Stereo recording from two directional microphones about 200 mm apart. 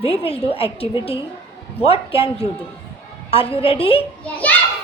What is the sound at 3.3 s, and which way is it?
Speech, 30° left (ahead or behind).